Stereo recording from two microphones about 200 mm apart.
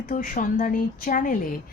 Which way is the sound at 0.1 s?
45° left (ahead or behind).